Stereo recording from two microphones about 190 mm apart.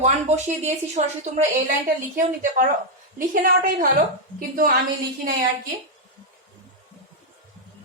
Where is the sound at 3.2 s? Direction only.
45° right (ahead or behind).